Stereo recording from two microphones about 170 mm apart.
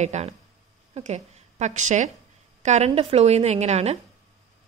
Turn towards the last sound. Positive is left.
turn(degrees=-40)  # may be behind; listen again after turning